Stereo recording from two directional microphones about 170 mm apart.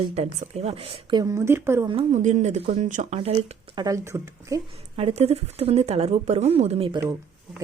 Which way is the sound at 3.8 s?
20° right (ahead or behind).